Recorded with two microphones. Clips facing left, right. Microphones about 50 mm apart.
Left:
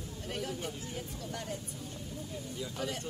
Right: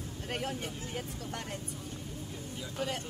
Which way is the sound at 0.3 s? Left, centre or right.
Right.